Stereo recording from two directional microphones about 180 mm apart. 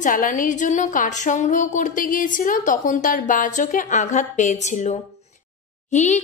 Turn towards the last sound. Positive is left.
turn(degrees=40)  # may be behind; listen again after turning